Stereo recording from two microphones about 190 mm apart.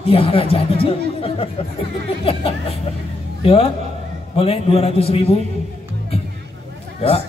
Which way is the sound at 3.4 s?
30° left (ahead or behind).